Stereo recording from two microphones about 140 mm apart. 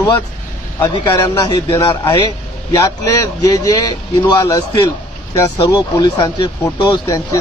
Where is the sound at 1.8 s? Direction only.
30° left (ahead or behind).